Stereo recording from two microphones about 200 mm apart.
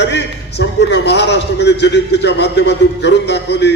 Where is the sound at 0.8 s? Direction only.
60° left (ahead or behind).